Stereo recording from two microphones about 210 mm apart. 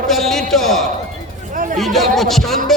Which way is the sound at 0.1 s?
Centre (ahead or behind).